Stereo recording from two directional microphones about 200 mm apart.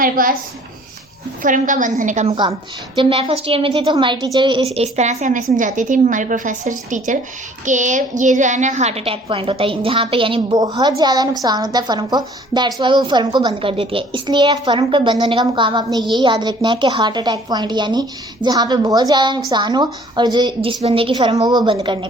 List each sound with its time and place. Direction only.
0.0 s a woman's voice: 45° right (ahead or behind)
1.4 s a woman's voice: 40° right (ahead or behind)
2.3 s a woman's voice: 20° right (ahead or behind)
4.7 s a woman's voice: 35° right (ahead or behind)